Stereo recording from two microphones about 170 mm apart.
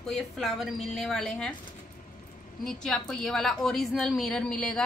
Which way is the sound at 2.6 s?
5° left (ahead or behind).